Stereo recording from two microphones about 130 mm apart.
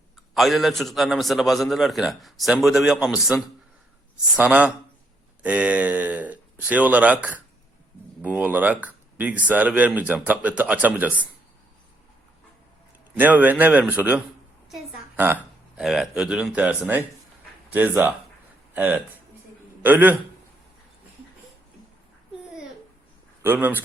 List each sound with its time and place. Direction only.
0.3 s a man's voice: centre (ahead or behind)
13.1 s speech: 15° right (ahead or behind)
15.8 s speech: 5° right (ahead or behind)
23.4 s speech: 15° right (ahead or behind)